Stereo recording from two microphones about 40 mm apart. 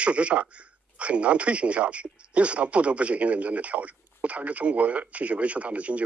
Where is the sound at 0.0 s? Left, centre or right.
Right.